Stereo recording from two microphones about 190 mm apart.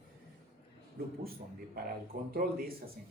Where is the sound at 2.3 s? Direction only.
50° right (ahead or behind).